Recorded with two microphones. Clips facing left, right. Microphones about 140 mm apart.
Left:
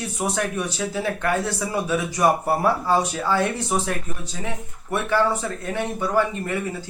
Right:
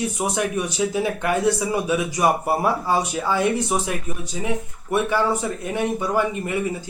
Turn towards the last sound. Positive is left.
turn(degrees=-15)  # may be behind; listen again after turning